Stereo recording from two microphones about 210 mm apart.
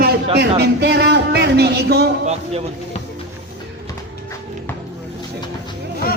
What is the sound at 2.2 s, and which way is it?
Speech, 30° right (ahead or behind).